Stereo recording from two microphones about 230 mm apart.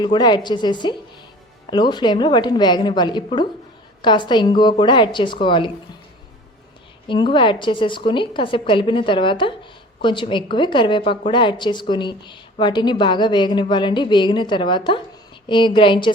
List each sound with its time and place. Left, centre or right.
0.0 s a woman's voice: centre
7.1 s a woman's voice: left